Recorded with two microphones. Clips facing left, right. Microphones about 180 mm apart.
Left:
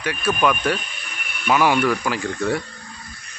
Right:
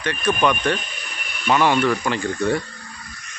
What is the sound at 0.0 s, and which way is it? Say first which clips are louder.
Speech: even; 10° left (ahead or behind).